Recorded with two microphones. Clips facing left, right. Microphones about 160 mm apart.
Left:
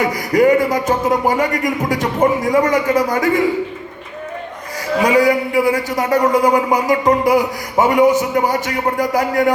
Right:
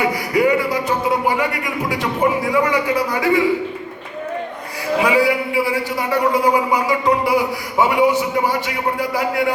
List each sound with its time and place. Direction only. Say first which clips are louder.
0.0 s a man's voice: left 3 dB; 45° left (ahead or behind)
5.0 s a man's voice: left 4 dB; 40° left (ahead or behind)